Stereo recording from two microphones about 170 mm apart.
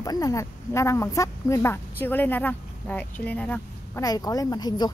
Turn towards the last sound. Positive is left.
turn(degrees=25)  # may be behind; listen again after turning